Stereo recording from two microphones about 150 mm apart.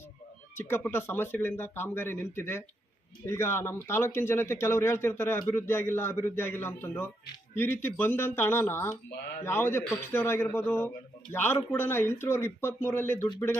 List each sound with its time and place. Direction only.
0.5 s speech: 15° left (ahead or behind)